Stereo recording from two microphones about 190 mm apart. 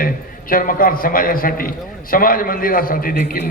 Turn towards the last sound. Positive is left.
turn(degrees=50)  # may be behind; listen again after turning